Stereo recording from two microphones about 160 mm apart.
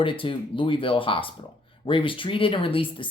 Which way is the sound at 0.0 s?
35° left (ahead or behind).